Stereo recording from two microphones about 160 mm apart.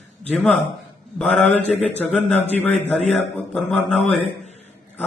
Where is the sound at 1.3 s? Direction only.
45° left (ahead or behind).